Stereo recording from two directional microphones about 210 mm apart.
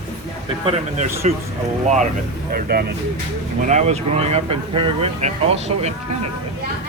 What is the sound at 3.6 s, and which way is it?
Speech, 35° right (ahead or behind).